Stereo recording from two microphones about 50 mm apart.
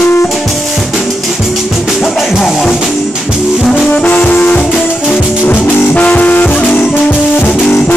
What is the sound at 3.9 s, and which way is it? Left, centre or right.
Brass instrument, left.